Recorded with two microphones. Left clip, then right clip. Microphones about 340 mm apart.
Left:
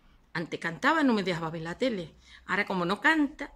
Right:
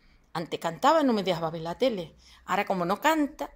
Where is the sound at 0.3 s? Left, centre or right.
Centre.